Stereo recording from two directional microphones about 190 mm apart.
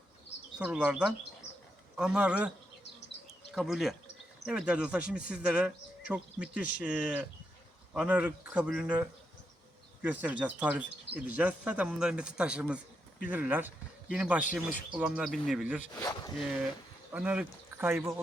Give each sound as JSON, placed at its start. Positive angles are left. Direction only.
{"t": 0.6, "sound": "speech", "side_deg": -5}
{"t": 3.5, "sound": "speech", "side_deg": 0}
{"t": 16.0, "sound": "speech", "side_deg": 20}
{"t": 17.1, "sound": "speech", "side_deg": -5}